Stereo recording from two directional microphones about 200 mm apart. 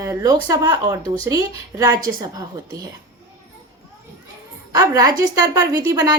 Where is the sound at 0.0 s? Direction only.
15° right (ahead or behind).